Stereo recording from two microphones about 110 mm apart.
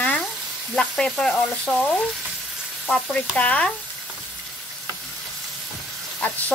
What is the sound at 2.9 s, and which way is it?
Speech, 10° left (ahead or behind).